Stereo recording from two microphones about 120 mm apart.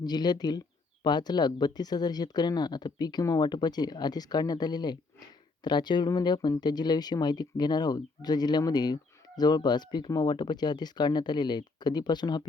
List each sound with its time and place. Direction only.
0.0 s speech: 35° left (ahead or behind)